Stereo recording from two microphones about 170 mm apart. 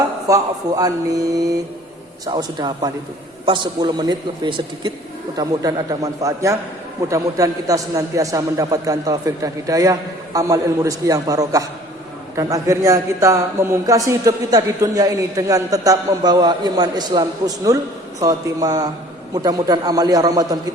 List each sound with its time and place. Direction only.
0.3 s a man's voice: 20° right (ahead or behind)